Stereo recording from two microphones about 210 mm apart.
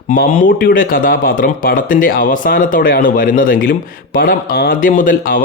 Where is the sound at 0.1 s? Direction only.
45° left (ahead or behind).